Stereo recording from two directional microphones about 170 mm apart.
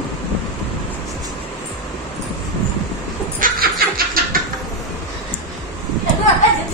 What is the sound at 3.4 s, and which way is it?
Snicker, 60° right (ahead or behind).